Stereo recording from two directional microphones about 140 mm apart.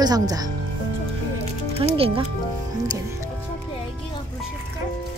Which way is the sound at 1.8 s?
40° right (ahead or behind).